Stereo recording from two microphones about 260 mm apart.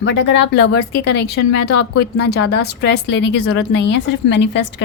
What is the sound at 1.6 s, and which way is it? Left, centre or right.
Speech, left.